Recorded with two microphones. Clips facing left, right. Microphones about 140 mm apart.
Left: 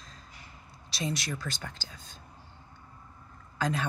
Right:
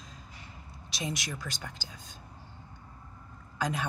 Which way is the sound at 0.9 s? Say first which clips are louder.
Left 3 dB; 15° right (ahead or behind).